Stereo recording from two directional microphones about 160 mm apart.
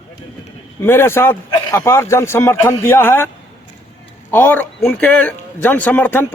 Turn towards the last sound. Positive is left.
turn(degrees=15)  # may be behind; listen again after turning